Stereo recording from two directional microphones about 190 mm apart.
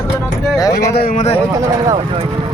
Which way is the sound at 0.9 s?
50° left (ahead or behind).